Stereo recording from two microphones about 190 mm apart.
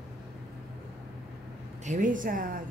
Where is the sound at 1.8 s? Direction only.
40° right (ahead or behind).